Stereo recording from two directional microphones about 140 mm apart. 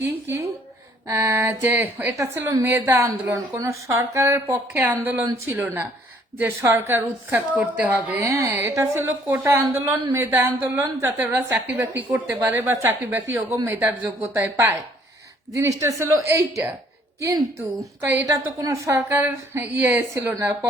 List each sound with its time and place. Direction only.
0.0 s a woman's voice: 15° right (ahead or behind)